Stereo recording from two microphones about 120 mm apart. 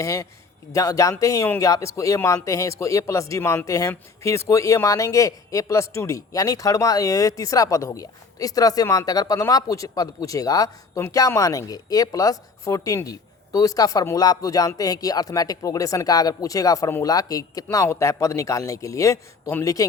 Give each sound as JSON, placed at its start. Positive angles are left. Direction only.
{"t": 0.0, "sound": "speech", "side_deg": 30}